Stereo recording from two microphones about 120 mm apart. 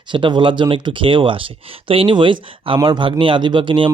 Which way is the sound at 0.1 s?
40° right (ahead or behind).